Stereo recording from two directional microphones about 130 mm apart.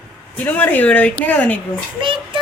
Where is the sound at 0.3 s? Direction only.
15° left (ahead or behind).